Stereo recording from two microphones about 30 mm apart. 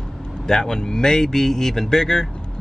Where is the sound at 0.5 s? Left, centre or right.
Left.